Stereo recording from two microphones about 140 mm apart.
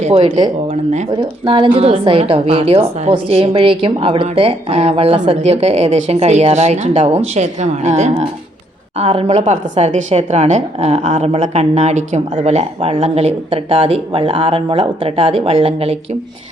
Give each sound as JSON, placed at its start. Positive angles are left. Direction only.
{"t": 1.1, "sound": "a woman's voice", "side_deg": -40}